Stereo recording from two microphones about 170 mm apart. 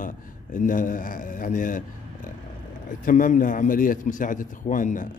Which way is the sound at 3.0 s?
50° left (ahead or behind).